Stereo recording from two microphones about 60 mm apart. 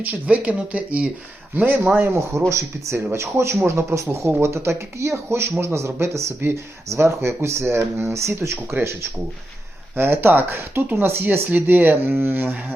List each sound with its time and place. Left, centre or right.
0.0 s speech: right
2.0 s speech: right
9.9 s speech: right